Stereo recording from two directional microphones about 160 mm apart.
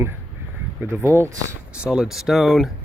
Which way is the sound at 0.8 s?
15° right (ahead or behind).